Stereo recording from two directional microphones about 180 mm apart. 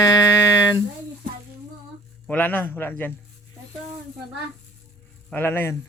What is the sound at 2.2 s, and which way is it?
Speech, 10° left (ahead or behind).